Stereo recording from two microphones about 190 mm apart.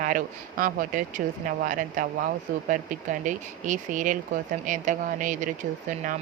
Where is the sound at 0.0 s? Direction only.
45° right (ahead or behind).